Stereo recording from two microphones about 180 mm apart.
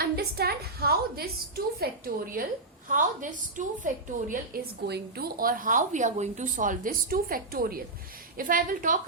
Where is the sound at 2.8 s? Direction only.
45° right (ahead or behind).